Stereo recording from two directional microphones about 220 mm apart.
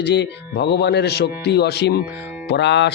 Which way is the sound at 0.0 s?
50° left (ahead or behind).